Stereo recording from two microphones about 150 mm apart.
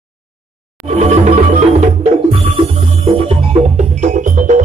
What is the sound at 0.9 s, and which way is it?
Music, 50° right (ahead or behind).